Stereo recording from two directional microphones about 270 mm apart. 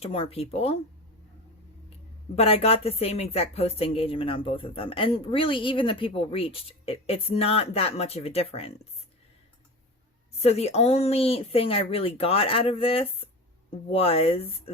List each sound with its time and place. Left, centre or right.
0.0 s a woman's voice: left
2.3 s a woman's voice: left
10.4 s a woman's voice: left